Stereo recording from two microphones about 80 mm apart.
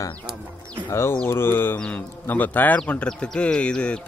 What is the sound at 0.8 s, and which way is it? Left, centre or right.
Speech, left.